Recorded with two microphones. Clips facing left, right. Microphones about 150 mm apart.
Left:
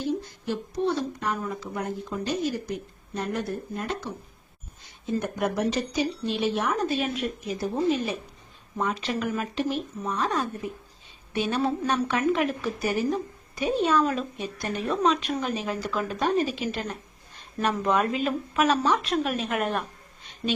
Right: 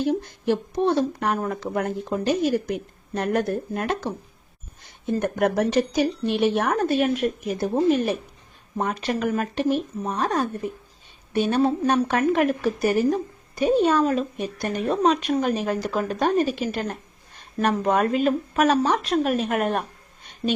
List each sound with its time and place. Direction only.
0.0 s speech: 70° right (ahead or behind)
5.2 s a woman's voice: 60° right (ahead or behind)